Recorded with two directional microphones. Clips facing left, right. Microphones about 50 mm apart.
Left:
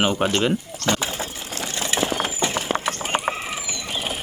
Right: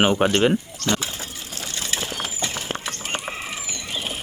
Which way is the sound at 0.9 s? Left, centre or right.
Left.